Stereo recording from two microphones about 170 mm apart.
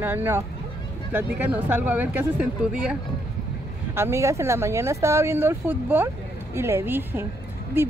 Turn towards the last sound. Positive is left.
turn(degrees=-10)  # may be behind; listen again after turning